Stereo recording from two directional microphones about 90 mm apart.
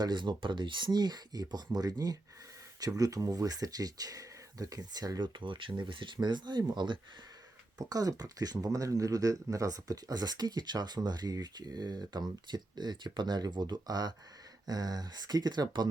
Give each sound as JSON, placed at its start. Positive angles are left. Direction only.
{"t": 0.0, "sound": "speech", "side_deg": -55}
{"t": 5.2, "sound": "speech", "side_deg": -65}
{"t": 7.8, "sound": "speech", "side_deg": -45}